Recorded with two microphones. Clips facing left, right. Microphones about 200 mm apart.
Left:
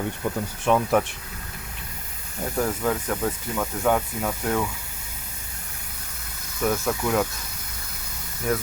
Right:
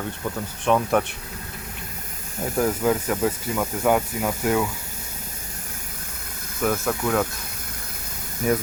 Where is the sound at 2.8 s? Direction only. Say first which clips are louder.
Right 3 dB; 10° right (ahead or behind).